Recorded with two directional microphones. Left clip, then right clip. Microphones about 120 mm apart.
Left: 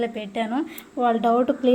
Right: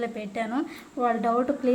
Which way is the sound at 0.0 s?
20° left (ahead or behind).